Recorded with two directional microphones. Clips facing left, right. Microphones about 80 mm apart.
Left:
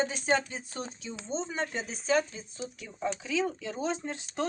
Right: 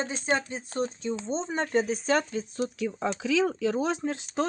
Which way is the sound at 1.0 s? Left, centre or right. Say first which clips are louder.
Right 5 dB; right.